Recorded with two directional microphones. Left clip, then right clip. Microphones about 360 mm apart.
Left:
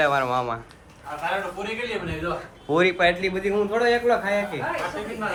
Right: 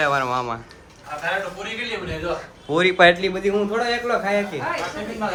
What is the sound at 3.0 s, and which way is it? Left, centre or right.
Speech, centre.